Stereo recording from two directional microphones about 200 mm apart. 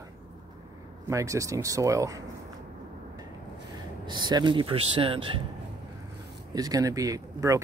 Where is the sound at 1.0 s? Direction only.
15° right (ahead or behind).